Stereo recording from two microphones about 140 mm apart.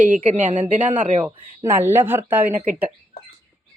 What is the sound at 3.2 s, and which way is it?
Bird, 90° left.